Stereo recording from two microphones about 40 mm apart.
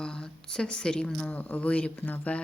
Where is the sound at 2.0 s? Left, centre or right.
Left.